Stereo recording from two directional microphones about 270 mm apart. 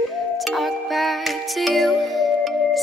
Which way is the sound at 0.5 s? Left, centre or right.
Centre.